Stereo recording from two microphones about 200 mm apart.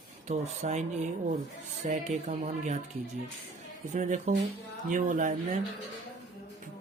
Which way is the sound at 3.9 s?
40° right (ahead or behind).